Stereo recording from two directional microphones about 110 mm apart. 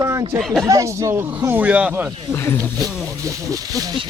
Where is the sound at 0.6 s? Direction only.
30° right (ahead or behind).